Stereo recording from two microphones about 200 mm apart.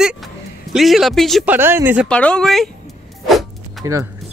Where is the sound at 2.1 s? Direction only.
5° left (ahead or behind).